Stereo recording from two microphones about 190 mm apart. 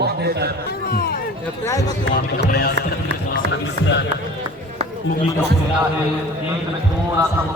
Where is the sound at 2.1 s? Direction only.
55° left (ahead or behind).